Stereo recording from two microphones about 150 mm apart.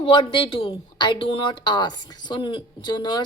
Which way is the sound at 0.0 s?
35° left (ahead or behind).